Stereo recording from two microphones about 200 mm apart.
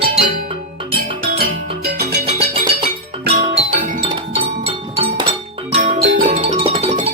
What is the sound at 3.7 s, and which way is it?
Music, 45° right (ahead or behind).